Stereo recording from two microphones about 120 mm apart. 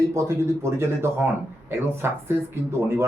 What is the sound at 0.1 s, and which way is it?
A man's voice, 25° right (ahead or behind).